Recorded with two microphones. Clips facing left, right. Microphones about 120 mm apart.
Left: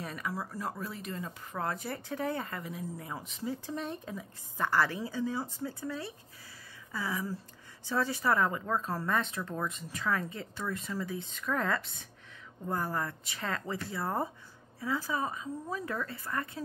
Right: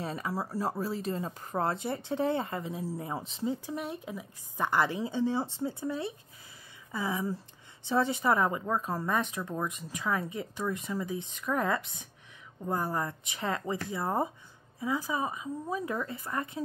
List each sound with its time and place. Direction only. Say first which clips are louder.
0.0 s speech: right 3 dB; 30° right (ahead or behind)
3.6 s speech: right 1 dB; 10° right (ahead or behind)